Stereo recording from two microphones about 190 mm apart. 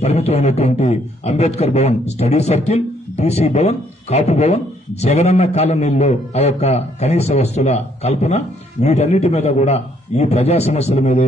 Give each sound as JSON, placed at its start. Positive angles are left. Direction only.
{"t": 0.0, "sound": "a man's voice", "side_deg": 35}